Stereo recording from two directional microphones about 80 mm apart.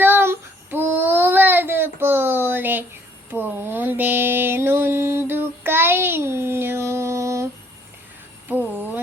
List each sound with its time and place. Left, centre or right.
0.0 s child singing: right
3.2 s mantra: right